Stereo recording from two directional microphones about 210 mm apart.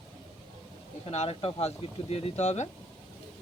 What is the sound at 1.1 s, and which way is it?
Speech, 30° left (ahead or behind).